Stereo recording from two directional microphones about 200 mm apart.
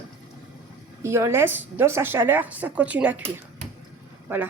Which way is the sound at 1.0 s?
15° right (ahead or behind).